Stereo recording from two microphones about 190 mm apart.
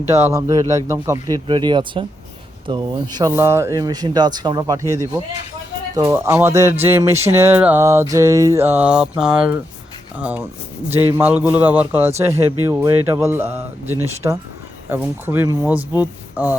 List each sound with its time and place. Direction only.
0.1 s music: 15° right (ahead or behind)
1.5 s speech: 25° right (ahead or behind)
6.0 s music: 15° right (ahead or behind)
16.0 s speech: 10° right (ahead or behind)